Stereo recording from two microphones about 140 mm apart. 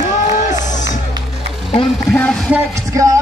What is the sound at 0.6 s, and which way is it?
Music, 60° left (ahead or behind).